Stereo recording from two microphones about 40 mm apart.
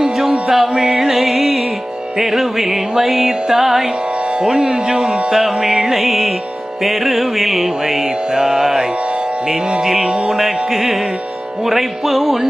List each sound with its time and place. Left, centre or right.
0.0 s music: centre
0.9 s music: centre
4.4 s speech: centre
5.4 s music: centre